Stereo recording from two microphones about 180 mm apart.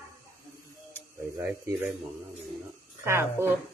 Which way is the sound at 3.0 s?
15° right (ahead or behind).